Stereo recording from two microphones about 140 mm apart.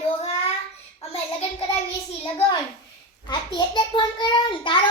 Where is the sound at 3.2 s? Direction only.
30° left (ahead or behind).